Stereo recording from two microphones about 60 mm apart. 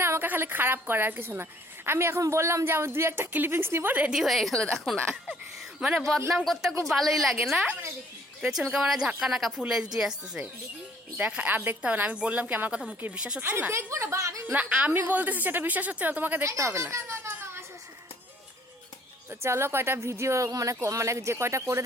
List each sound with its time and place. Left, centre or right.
0.0 s a woman's voice: right
4.1 s a woman's voice: centre
5.8 s a woman's voice: centre
8.4 s a woman's voice: centre
11.2 s a woman's voice: right
13.1 s a woman's voice: centre
13.5 s a woman's voice: right
13.7 s speech: right
14.4 s speech: right
16.4 s speech: right
19.3 s speech: right
20.8 s speech: right